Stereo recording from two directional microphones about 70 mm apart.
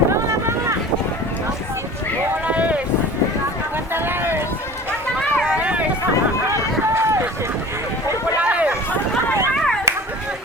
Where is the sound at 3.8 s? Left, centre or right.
Right.